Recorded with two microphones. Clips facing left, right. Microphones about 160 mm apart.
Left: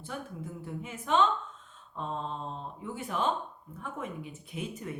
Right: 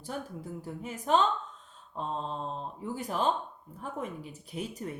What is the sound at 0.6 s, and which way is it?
A woman's voice, 40° right (ahead or behind).